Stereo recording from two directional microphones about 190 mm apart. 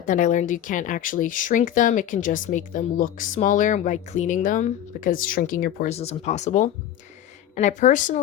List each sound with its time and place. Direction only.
0.0 s speech: 40° left (ahead or behind)
5.9 s speech: 35° left (ahead or behind)